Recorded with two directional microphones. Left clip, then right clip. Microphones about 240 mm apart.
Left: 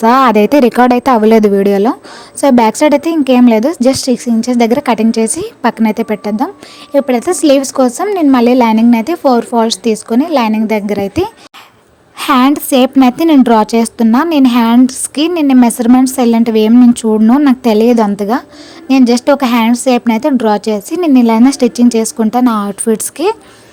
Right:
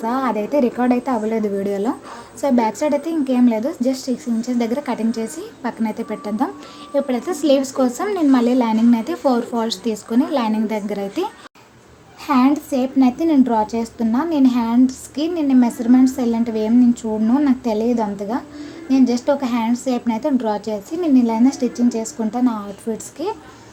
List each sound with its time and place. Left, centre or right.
0.0 s a woman's voice: left